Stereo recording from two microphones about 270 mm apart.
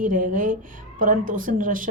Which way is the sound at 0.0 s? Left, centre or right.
Right.